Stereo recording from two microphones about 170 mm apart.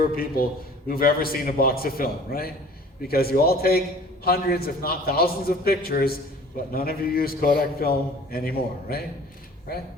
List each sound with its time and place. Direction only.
0.0 s a man's voice: 60° left (ahead or behind)